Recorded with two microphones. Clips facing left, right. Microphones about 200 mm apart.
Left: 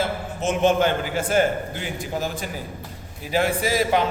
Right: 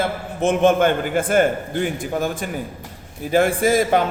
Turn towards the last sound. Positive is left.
turn(degrees=-50)  # may be behind; listen again after turning